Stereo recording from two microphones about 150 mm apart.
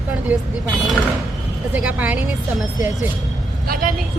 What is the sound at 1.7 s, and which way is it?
Speech, 10° right (ahead or behind).